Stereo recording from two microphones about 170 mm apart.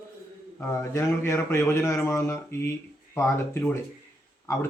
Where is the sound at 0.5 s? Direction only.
15° left (ahead or behind).